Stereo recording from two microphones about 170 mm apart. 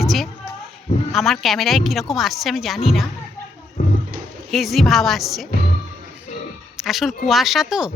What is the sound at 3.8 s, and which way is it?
Roar, 45° left (ahead or behind).